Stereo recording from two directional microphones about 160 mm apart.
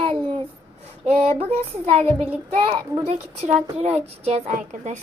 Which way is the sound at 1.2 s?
40° right (ahead or behind).